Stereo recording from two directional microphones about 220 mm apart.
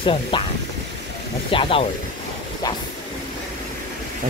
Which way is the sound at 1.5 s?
25° left (ahead or behind).